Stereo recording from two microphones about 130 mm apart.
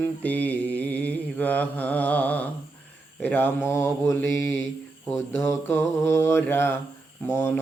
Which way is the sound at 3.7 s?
20° left (ahead or behind).